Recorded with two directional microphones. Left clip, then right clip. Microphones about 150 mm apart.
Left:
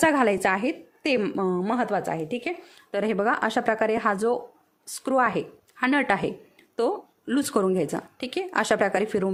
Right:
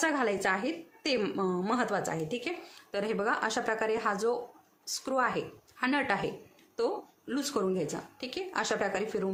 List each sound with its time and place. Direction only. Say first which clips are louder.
0.0 s speech: left 8 dB; 50° left (ahead or behind)